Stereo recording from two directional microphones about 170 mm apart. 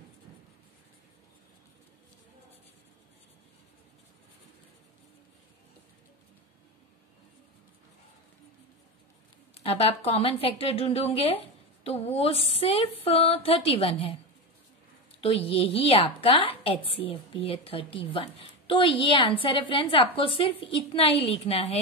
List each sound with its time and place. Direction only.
9.5 s a woman's voice: 35° left (ahead or behind)
15.1 s a woman's voice: 35° left (ahead or behind)